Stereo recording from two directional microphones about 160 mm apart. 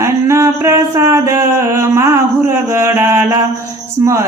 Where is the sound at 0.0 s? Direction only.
15° right (ahead or behind).